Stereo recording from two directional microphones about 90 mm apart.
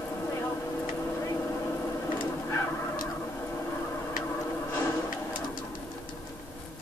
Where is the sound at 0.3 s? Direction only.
30° left (ahead or behind).